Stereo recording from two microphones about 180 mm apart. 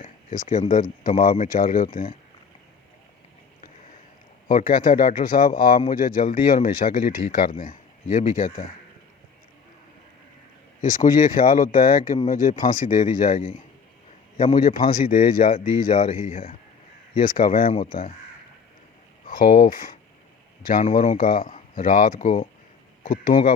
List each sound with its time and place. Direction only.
0.0 s speech: 45° left (ahead or behind)
4.8 s speech: 50° left (ahead or behind)
10.8 s speech: 45° left (ahead or behind)
19.3 s speech: 50° left (ahead or behind)
23.0 s speech: 50° left (ahead or behind)